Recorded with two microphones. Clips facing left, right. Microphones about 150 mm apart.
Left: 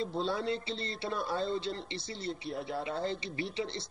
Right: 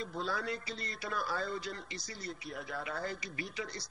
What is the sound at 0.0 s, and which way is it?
A man's voice, 30° left (ahead or behind).